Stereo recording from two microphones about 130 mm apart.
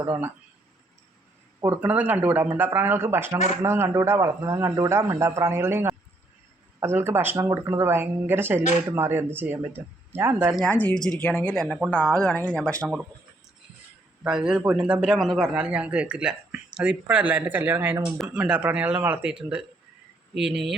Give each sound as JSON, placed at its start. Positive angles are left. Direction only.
{"t": 1.6, "sound": "a man's voice", "side_deg": -15}
{"t": 10.7, "sound": "speech", "side_deg": 10}
{"t": 14.3, "sound": "a man's voice", "side_deg": -5}